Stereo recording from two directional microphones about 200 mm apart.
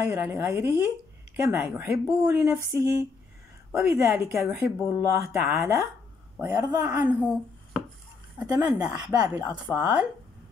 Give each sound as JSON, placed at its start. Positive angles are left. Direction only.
{"t": 0.0, "sound": "speech", "side_deg": -10}
{"t": 8.4, "sound": "speech", "side_deg": -5}